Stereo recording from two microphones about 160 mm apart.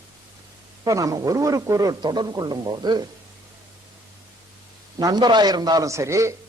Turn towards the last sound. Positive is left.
turn(degrees=-20)  # may be behind; listen again after turning